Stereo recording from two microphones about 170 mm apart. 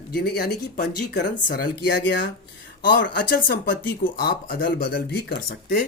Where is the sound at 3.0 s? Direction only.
60° left (ahead or behind).